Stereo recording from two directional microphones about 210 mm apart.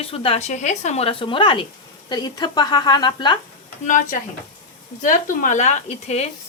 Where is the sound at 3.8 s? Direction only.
40° left (ahead or behind).